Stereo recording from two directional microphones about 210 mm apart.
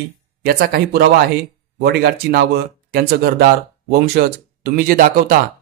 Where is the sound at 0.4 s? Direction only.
45° right (ahead or behind).